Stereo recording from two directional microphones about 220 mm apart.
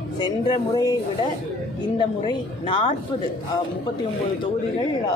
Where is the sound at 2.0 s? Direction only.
20° left (ahead or behind).